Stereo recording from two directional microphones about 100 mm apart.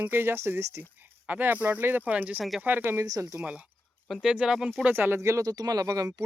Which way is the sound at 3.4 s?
10° right (ahead or behind).